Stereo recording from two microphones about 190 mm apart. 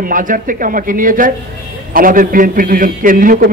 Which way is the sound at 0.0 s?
45° right (ahead or behind).